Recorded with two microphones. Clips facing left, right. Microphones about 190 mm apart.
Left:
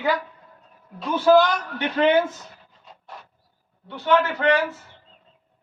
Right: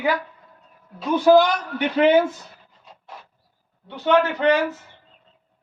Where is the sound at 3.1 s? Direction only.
Centre (ahead or behind).